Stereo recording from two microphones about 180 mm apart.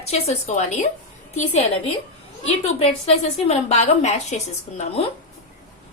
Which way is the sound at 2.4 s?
35° left (ahead or behind).